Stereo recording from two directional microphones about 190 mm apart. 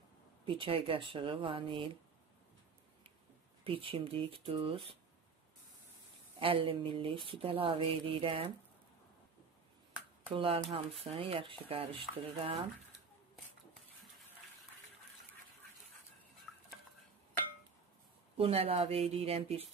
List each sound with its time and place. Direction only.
0.5 s speech: 30° right (ahead or behind)
3.6 s speech: 30° right (ahead or behind)
6.4 s speech: 30° right (ahead or behind)
10.3 s speech: 30° right (ahead or behind)
18.4 s speech: 30° right (ahead or behind)